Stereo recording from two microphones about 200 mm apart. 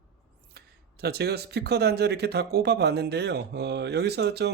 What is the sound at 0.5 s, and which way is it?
Speech, 50° right (ahead or behind).